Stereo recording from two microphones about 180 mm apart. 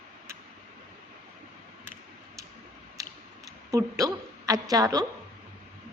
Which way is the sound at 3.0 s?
20° right (ahead or behind).